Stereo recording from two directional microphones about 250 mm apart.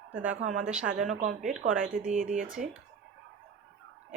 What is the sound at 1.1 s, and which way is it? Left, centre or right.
A woman's voice, right.